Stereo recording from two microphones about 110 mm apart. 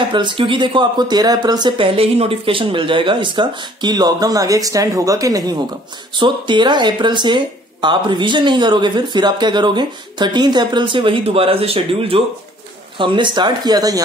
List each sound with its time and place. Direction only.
0.1 s speech: 45° right (ahead or behind)
2.0 s speech: 60° right (ahead or behind); by 5.6 s 30° right (ahead or behind)
6.1 s speech: 45° right (ahead or behind)
12.9 s speech: 50° right (ahead or behind)